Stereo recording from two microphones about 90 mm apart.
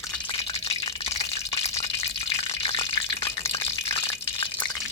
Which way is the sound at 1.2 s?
40° left (ahead or behind).